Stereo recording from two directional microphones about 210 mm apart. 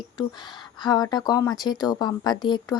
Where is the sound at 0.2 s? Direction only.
20° left (ahead or behind).